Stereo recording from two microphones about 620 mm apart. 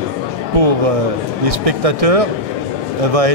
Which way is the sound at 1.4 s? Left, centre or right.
Right.